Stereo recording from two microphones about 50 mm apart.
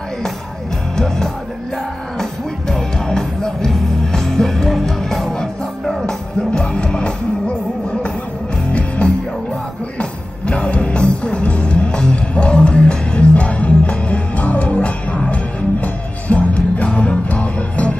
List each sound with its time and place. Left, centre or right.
0.9 s music: centre
2.7 s music: centre
8.7 s music: left